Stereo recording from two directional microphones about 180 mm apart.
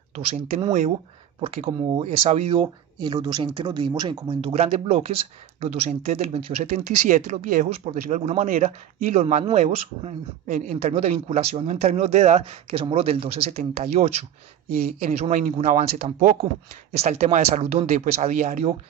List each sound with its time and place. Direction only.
1.4 s speech: 35° right (ahead or behind)